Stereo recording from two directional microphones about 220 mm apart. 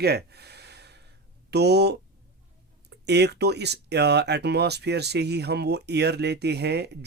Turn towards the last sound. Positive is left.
turn(degrees=-50)  # may be behind; listen again after turning